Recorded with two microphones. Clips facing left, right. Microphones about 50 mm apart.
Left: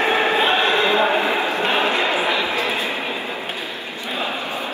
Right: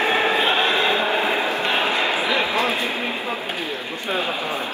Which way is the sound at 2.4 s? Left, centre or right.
Right.